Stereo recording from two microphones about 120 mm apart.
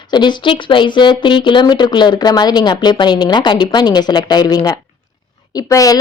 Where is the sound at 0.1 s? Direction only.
40° left (ahead or behind).